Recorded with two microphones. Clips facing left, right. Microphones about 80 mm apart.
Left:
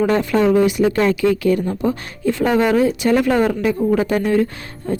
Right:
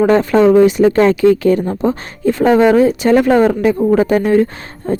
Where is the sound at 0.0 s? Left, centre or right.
Right.